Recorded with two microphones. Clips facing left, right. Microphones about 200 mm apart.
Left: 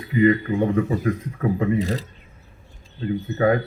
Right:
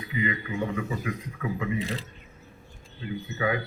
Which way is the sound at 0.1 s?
50° left (ahead or behind).